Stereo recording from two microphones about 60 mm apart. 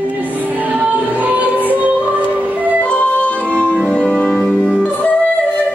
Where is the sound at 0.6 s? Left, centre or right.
Right.